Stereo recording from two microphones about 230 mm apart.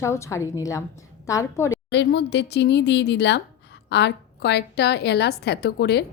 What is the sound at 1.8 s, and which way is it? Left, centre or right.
A woman's voice, left.